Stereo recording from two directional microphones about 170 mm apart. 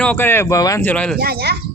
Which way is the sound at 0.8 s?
5° left (ahead or behind).